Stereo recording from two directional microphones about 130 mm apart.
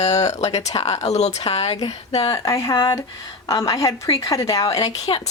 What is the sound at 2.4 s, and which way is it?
Speech, 25° left (ahead or behind).